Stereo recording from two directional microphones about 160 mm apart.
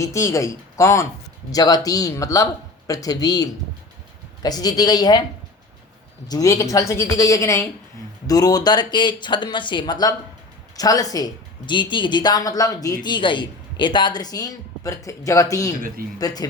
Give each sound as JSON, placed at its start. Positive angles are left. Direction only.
{"t": 0.0, "sound": "speech", "side_deg": 20}
{"t": 6.2, "sound": "speech", "side_deg": 20}